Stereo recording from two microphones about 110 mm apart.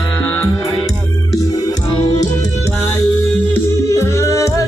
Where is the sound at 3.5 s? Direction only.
25° left (ahead or behind).